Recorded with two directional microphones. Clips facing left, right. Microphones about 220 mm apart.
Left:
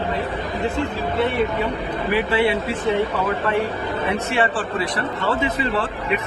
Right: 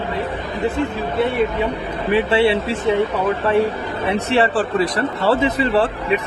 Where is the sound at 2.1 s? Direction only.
25° right (ahead or behind).